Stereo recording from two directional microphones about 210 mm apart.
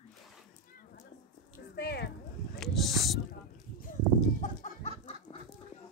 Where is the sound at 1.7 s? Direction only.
50° left (ahead or behind).